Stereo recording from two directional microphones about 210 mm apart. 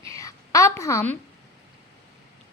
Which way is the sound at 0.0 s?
15° left (ahead or behind).